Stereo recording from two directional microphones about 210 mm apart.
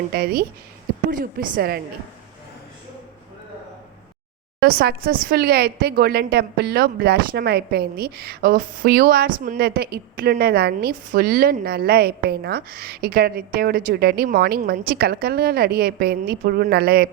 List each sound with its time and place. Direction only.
0.1 s a woman's voice: 45° right (ahead or behind)
4.6 s a woman's voice: 50° right (ahead or behind)